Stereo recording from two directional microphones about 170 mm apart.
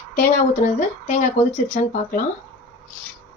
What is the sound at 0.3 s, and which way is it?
A woman's voice, 45° left (ahead or behind).